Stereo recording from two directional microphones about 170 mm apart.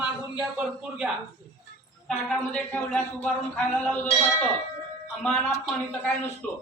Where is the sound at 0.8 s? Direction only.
5° right (ahead or behind).